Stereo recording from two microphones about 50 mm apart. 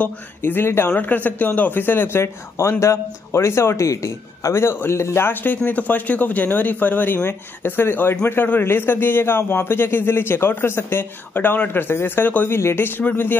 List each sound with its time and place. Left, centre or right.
0.4 s a man's voice: left
0.9 s a man's voice: left
2.8 s speech: left
4.6 s a man's voice: left
5.3 s a man's voice: left